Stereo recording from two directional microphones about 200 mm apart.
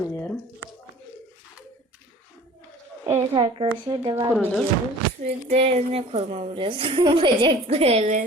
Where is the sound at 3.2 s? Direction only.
25° right (ahead or behind).